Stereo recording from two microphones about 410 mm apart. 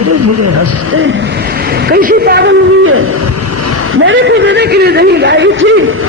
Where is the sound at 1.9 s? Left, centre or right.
Right.